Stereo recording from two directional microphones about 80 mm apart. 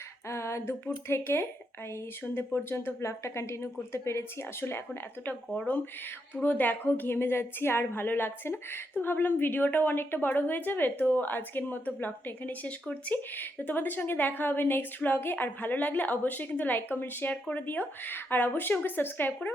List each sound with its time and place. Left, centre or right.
0.3 s female singing: left
1.0 s speech: left
6.3 s speech: left